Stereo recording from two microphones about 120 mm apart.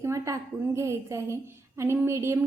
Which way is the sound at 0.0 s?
25° right (ahead or behind).